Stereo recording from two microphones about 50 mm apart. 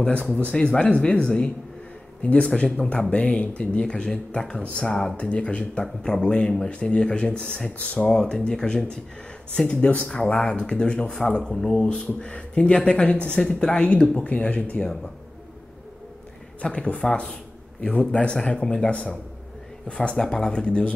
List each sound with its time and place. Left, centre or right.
0.0 s speech: left
11.7 s speech: left
16.7 s speech: left